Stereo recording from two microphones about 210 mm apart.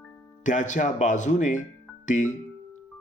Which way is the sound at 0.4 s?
35° left (ahead or behind).